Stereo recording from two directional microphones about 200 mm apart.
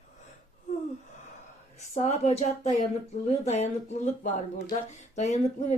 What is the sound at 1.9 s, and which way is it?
A woman's voice, 30° left (ahead or behind).